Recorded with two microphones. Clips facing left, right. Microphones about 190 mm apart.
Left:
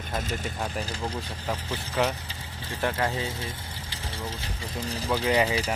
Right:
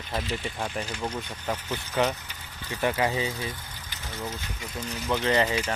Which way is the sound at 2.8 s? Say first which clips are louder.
Right 2 dB; 5° right (ahead or behind).